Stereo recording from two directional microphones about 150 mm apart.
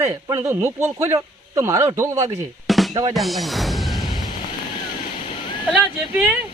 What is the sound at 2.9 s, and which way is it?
Speech, 25° right (ahead or behind).